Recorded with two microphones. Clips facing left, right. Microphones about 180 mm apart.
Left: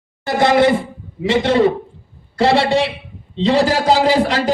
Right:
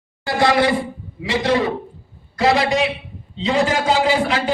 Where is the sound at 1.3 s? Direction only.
25° left (ahead or behind).